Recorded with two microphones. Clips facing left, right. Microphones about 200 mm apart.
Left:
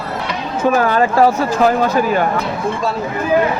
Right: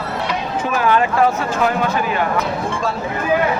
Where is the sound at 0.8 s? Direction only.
40° left (ahead or behind).